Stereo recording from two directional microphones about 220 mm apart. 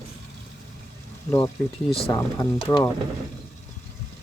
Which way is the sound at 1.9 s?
25° left (ahead or behind).